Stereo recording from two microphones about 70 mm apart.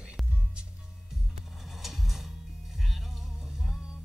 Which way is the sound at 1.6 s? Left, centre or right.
Centre.